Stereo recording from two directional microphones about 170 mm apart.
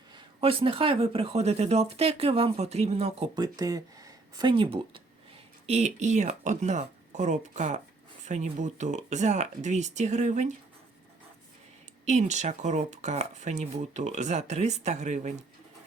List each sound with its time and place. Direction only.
0.3 s speech: 30° right (ahead or behind)
3.3 s speech: 20° right (ahead or behind); by 10.5 s 45° right (ahead or behind)
12.0 s speech: 40° right (ahead or behind)